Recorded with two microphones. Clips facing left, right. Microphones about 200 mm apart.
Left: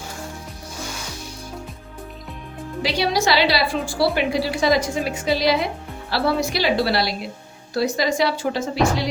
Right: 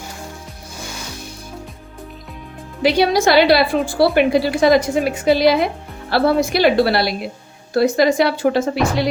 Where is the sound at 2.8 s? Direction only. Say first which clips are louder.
Right 7 dB; 55° right (ahead or behind).